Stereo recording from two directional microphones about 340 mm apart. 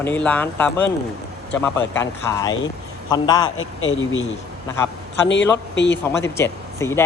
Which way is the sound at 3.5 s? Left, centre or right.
Left.